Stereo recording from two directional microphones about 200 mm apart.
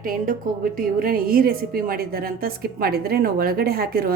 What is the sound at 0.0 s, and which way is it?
A woman's voice, 45° right (ahead or behind).